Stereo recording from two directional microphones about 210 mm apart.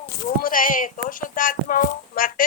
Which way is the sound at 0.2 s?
40° left (ahead or behind).